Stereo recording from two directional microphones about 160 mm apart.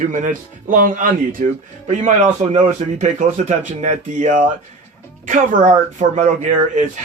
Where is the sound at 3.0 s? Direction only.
50° right (ahead or behind).